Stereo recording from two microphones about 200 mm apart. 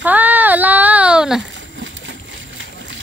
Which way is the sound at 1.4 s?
65° right (ahead or behind).